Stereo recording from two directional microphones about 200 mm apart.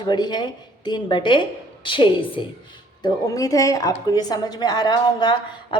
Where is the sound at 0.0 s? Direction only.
20° left (ahead or behind).